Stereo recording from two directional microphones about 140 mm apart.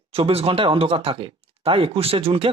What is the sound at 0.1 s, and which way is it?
Speech, 45° right (ahead or behind).